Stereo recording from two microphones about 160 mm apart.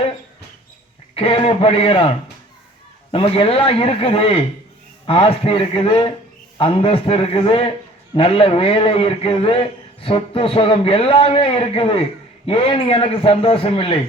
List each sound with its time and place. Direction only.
1.1 s a man's voice: 35° left (ahead or behind)
3.1 s a man's voice: 35° left (ahead or behind)